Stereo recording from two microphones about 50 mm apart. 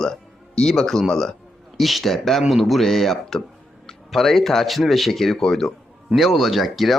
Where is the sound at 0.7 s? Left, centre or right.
Centre.